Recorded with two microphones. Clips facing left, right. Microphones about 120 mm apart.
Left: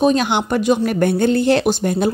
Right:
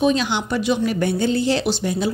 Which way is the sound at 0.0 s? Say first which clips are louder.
Left 3 dB; 50° left (ahead or behind).